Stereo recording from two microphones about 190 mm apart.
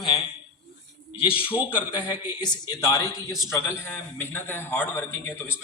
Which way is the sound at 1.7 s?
25° left (ahead or behind).